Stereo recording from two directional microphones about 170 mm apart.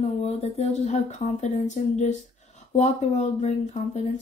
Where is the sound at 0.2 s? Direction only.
40° left (ahead or behind).